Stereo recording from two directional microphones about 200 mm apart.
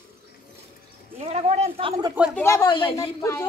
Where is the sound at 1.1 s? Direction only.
30° right (ahead or behind).